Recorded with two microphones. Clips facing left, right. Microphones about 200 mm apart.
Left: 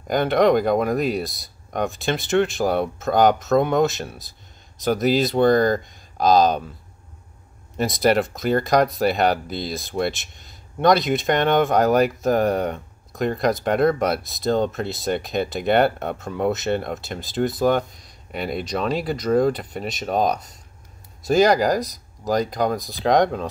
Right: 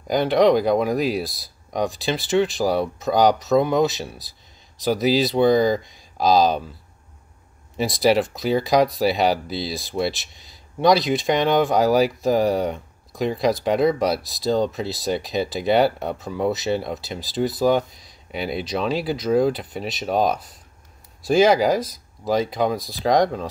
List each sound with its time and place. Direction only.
0.1 s speech: centre (ahead or behind)
4.8 s speech: centre (ahead or behind)
7.7 s speech: centre (ahead or behind)